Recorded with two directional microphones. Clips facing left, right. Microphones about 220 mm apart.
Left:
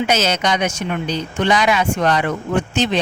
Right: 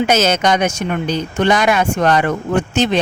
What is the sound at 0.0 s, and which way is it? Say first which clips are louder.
Speech: right 4 dB; 45° right (ahead or behind).